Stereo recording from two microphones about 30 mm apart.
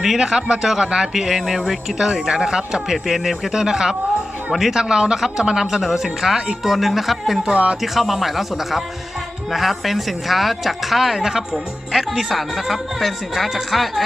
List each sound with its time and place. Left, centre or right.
0.0 s speech: centre
2.0 s speech: centre
2.9 s speech: centre
7.5 s speech: right
7.8 s speech: centre